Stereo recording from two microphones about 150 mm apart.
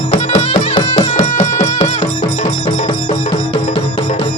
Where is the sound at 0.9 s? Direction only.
50° left (ahead or behind).